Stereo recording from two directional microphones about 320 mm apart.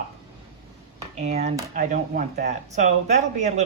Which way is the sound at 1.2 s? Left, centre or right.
Right.